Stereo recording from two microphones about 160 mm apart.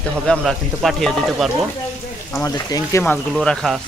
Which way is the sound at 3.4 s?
Centre (ahead or behind).